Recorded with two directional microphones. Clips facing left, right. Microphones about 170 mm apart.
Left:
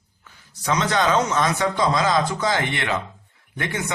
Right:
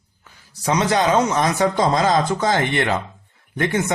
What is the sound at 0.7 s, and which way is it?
Speech, 30° right (ahead or behind).